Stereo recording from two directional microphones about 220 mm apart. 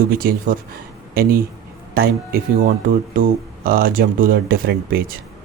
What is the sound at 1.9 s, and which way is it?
Speech, 45° right (ahead or behind).